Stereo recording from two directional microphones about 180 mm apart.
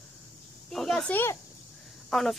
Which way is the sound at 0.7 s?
5° left (ahead or behind).